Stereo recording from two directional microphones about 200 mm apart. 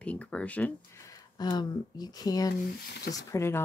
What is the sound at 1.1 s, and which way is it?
Speech, 20° left (ahead or behind).